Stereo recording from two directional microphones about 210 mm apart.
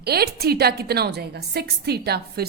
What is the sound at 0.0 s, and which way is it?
A woman's voice, 50° right (ahead or behind).